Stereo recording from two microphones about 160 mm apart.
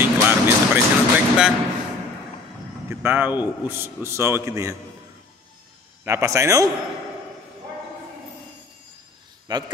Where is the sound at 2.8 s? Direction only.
10° right (ahead or behind).